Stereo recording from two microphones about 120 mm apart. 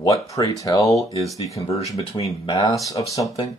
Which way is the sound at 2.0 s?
60° left (ahead or behind).